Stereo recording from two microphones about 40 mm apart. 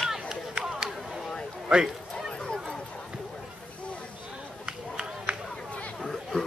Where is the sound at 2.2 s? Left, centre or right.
Centre.